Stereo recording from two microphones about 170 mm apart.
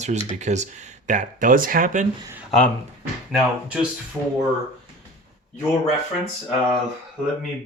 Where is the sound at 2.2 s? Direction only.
10° right (ahead or behind).